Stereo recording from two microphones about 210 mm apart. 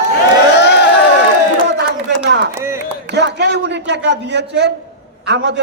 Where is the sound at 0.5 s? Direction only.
55° left (ahead or behind).